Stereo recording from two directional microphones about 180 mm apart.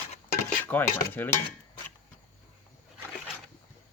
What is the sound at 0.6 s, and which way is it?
Speech, 10° left (ahead or behind).